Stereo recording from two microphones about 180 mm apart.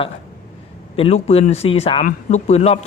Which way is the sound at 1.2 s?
35° left (ahead or behind).